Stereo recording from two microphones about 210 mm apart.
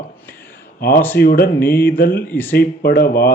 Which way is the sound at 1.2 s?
45° left (ahead or behind).